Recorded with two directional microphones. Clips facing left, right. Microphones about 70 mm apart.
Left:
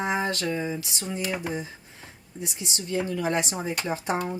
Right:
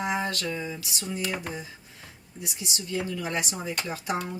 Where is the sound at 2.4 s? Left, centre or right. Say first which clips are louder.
Left 2 dB; left.